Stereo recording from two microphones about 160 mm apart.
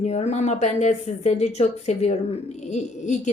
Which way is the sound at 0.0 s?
45° left (ahead or behind).